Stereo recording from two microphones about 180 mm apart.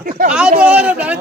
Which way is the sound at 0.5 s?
5° right (ahead or behind).